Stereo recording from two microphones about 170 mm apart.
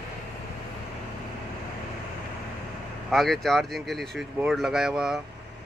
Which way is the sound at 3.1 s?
Centre (ahead or behind).